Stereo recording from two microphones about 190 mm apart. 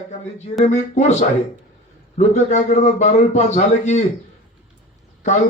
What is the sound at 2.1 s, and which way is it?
A man's voice, 40° left (ahead or behind).